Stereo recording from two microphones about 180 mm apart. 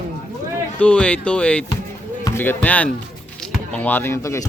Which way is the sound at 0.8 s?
5° left (ahead or behind).